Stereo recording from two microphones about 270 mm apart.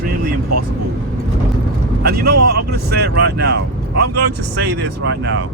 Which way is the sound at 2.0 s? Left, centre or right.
Right.